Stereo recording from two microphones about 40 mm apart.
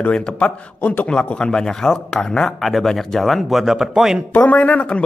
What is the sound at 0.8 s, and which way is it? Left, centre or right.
Speech, left.